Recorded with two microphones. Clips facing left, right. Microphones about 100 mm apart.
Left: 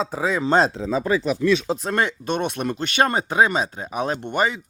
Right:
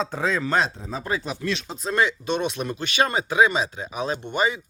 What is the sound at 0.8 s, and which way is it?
Speech, 90° left.